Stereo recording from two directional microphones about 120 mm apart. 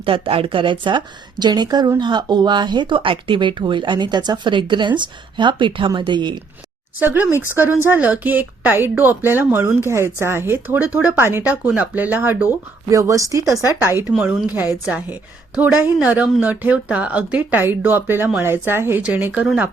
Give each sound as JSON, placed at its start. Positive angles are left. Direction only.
{"t": 0.0, "sound": "speech", "side_deg": -50}
{"t": 7.0, "sound": "speech", "side_deg": -15}
{"t": 12.9, "sound": "speech", "side_deg": -25}